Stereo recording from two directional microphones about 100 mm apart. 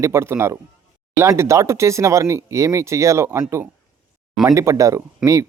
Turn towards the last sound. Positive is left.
turn(degrees=-30)  # may be behind; listen again after turning